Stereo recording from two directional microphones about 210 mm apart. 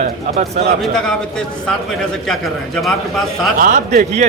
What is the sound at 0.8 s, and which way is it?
A man's voice, 5° left (ahead or behind).